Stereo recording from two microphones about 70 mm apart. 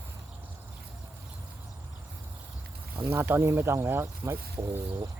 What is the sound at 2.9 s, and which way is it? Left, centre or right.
Speech, right.